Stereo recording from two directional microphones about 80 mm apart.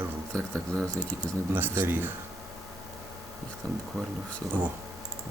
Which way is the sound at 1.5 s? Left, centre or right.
Right.